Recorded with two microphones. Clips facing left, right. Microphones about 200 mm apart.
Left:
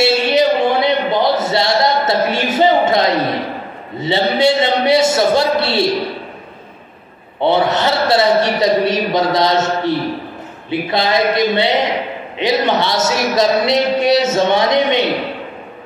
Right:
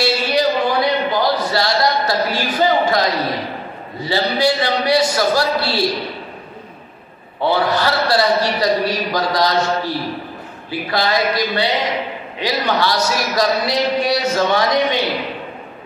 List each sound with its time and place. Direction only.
0.0 s a sound: 25° left (ahead or behind)
4.0 s a man's voice: 25° left (ahead or behind)
7.3 s a man's voice: 25° left (ahead or behind)